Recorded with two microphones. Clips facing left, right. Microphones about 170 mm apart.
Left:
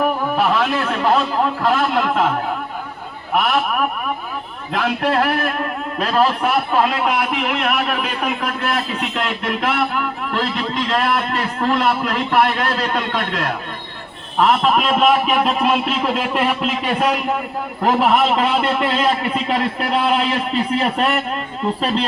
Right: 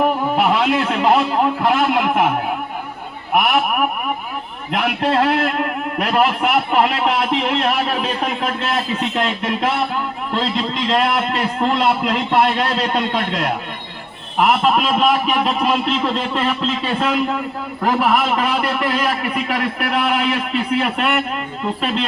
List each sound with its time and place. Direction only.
0.0 s a man's voice: 20° right (ahead or behind)
3.3 s a man's voice: 15° right (ahead or behind)
14.3 s a man's voice: 10° right (ahead or behind)
14.8 s a man's voice: centre (ahead or behind); by 22.0 s 35° left (ahead or behind)